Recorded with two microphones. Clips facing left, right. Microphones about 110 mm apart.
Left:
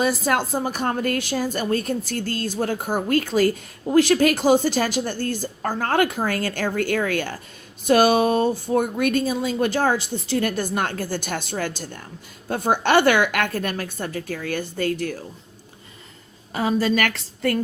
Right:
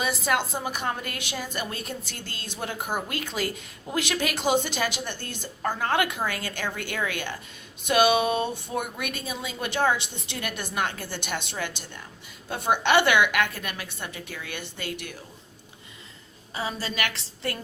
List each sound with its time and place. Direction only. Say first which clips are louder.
0.0 s a woman's voice: left 5 dB; 40° left (ahead or behind)
16.6 s a woman's voice: left 10 dB; 50° left (ahead or behind)